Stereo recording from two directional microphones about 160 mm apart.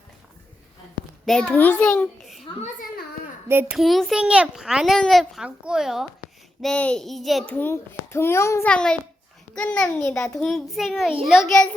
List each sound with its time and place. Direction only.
1.2 s a child's voice: 5° left (ahead or behind)
3.5 s a child's voice: 10° right (ahead or behind)
3.8 s a child's voice: centre (ahead or behind)
7.5 s a child's voice: 15° left (ahead or behind)
8.7 s a child's voice: 5° left (ahead or behind)